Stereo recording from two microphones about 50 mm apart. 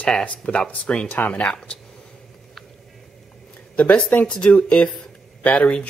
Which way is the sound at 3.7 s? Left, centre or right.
Left.